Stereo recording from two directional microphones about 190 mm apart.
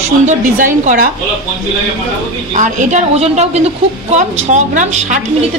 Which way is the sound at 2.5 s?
40° right (ahead or behind).